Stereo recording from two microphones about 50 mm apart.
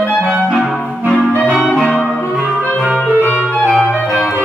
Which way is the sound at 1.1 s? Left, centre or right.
Left.